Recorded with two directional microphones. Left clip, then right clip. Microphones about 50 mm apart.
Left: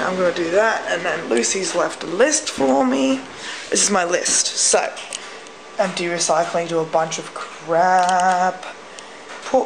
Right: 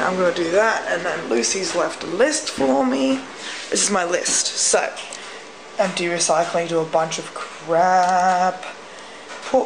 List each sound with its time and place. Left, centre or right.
0.2 s speech: centre
0.8 s speech: left
1.3 s speech: left
1.7 s speech: left
3.7 s speech: left
5.8 s speech: centre